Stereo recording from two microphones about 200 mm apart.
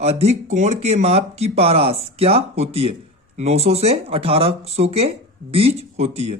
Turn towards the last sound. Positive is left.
turn(degrees=-30)  # may be behind; listen again after turning